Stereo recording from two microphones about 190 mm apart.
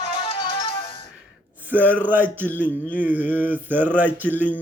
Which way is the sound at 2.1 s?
10° right (ahead or behind).